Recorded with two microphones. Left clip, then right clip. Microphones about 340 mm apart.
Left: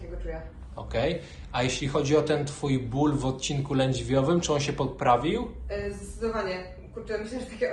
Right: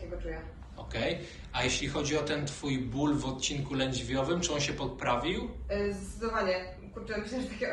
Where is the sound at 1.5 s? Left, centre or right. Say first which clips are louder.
Left 4 dB; centre.